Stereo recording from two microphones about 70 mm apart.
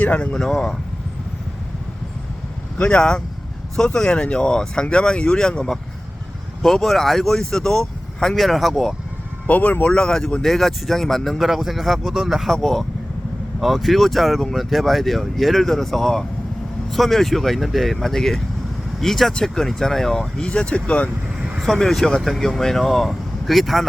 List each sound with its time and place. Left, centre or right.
0.0 s speech: left
0.3 s speech: centre
2.7 s speech: centre
9.5 s speech: left; by 12.5 s centre
13.6 s speech: centre
21.3 s vehicle: centre
21.6 s speech: centre